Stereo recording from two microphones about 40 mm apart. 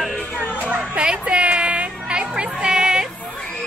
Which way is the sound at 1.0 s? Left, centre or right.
Right.